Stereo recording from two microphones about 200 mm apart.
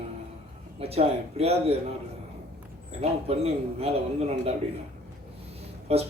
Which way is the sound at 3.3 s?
30° right (ahead or behind).